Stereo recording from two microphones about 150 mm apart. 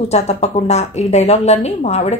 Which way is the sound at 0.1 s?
45° left (ahead or behind).